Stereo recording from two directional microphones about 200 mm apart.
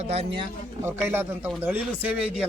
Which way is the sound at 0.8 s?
10° right (ahead or behind).